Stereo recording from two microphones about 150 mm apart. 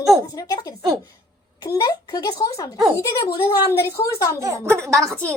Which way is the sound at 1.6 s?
25° left (ahead or behind).